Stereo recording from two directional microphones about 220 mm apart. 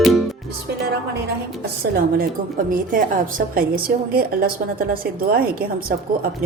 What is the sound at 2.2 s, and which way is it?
A woman's voice, 40° right (ahead or behind).